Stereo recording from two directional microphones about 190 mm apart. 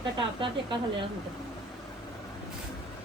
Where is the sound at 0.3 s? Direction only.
25° right (ahead or behind).